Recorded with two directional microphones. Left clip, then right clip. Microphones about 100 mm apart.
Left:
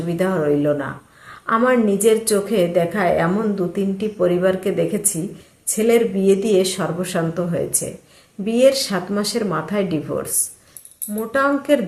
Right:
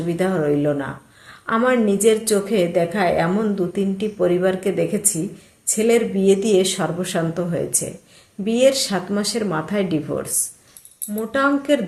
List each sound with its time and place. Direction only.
0.1 s a woman's voice: 20° right (ahead or behind)